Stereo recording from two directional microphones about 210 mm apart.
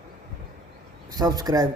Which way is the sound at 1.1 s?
20° right (ahead or behind).